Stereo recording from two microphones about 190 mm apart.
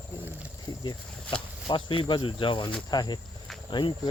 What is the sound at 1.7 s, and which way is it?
Speech, 25° left (ahead or behind).